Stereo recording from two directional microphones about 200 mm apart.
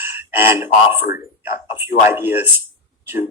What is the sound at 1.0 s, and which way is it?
Speech, 45° left (ahead or behind).